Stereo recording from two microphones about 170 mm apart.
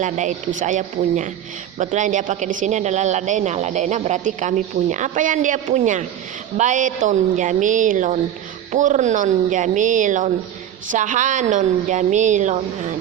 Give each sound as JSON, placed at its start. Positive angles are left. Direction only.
{"t": 0.0, "sound": "a woman's voice", "side_deg": -45}